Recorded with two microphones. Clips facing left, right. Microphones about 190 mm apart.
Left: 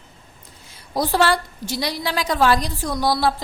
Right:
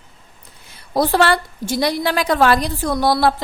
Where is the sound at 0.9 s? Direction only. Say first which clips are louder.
Right 3 dB; 60° right (ahead or behind).